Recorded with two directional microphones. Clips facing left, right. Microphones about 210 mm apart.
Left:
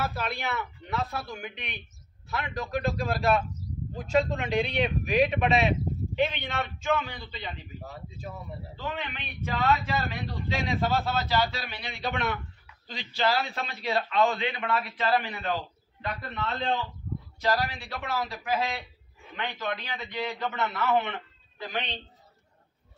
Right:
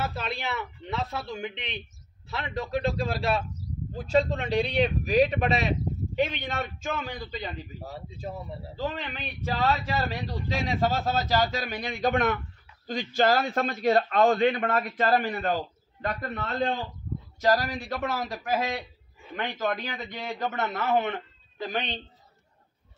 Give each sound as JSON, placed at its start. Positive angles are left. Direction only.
{"t": 0.0, "sound": "a man's voice", "side_deg": -25}